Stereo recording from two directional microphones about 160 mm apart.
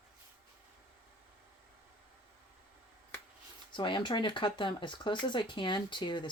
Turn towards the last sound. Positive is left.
turn(degrees=30)  # may be behind; listen again after turning